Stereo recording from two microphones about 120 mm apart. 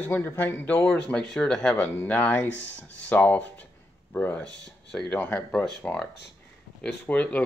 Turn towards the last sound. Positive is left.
turn(degrees=10)  # may be behind; listen again after turning